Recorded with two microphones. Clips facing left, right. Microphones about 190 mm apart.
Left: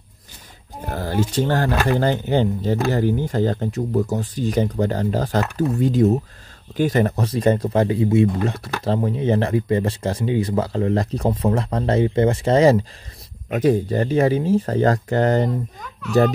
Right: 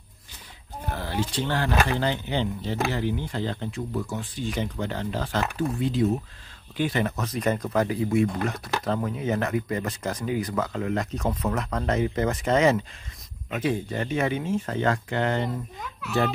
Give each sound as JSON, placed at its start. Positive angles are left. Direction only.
{"t": 0.8, "sound": "speech", "side_deg": 45}
{"t": 15.8, "sound": "a child's voice", "side_deg": -5}